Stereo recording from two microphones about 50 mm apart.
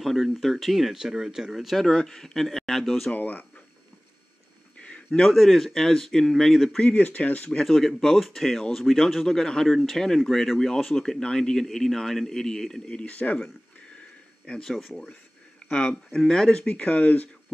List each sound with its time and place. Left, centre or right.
0.0 s speech: centre
1.9 s a man's voice: centre
3.1 s speech: left
4.8 s a sound: left
5.3 s speech: centre
6.8 s speech: left
7.5 s a man's voice: centre
12.9 s speech: left
14.4 s a man's voice: centre
15.7 s speech: centre
16.1 s a man's voice: centre
16.6 s speech: left